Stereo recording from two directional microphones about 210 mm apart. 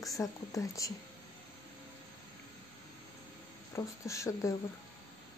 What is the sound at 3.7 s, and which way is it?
Speech, 15° left (ahead or behind).